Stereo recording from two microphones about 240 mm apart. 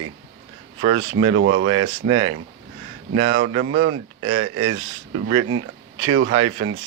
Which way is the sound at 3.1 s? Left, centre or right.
Right.